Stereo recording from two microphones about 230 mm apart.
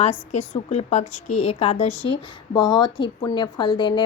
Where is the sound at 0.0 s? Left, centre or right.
Left.